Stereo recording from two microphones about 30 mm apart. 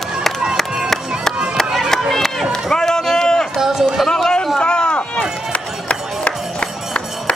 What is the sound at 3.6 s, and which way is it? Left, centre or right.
Run, centre.